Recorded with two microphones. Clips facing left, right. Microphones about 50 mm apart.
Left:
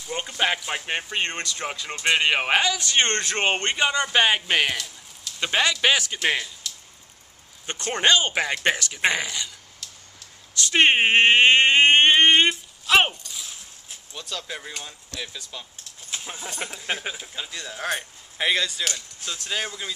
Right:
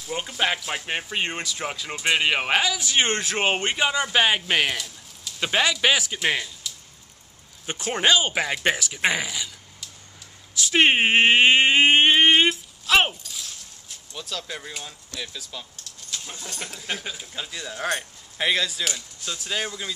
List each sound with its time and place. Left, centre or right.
0.0 s speech: centre
7.6 s speech: centre
17.2 s speech: centre